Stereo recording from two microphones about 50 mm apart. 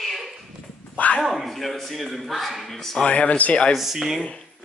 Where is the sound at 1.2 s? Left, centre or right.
Centre.